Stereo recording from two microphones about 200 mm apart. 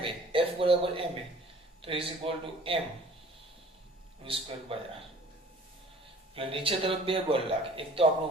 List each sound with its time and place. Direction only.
0.0 s a sound: 25° right (ahead or behind)
1.8 s speech: 30° right (ahead or behind)
4.2 s speech: 25° right (ahead or behind)
6.3 s speech: 25° right (ahead or behind)